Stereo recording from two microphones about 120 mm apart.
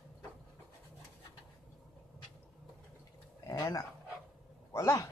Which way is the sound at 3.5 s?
30° left (ahead or behind).